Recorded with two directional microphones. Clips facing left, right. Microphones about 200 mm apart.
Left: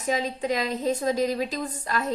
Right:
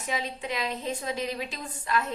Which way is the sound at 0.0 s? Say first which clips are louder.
Left 6 dB; 40° left (ahead or behind).